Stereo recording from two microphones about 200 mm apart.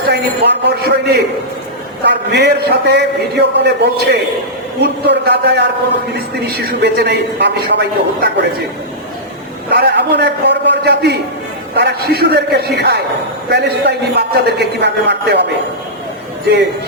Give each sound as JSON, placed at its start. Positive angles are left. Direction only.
{"t": 0.1, "sound": "a man's voice", "side_deg": -55}
{"t": 9.6, "sound": "a man's voice", "side_deg": -55}